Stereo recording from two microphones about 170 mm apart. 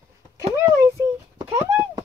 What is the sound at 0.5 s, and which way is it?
Speech, 15° right (ahead or behind).